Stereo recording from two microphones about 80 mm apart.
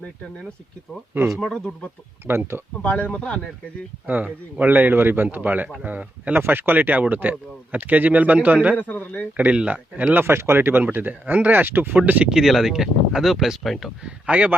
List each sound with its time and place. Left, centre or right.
1.4 s speech: centre
2.2 s speech: right
2.8 s speech: centre
4.0 s speech: centre
8.8 s a man's voice: left
9.4 s speech: centre
12.3 s speech: centre
14.3 s speech: centre